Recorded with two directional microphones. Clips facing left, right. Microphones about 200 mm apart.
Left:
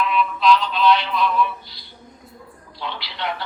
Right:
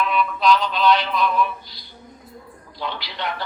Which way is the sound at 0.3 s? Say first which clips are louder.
Left 1 dB; 40° right (ahead or behind).